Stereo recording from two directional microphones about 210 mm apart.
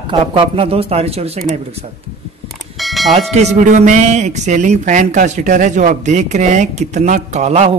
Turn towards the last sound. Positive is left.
turn(degrees=-30)  # may be behind; listen again after turning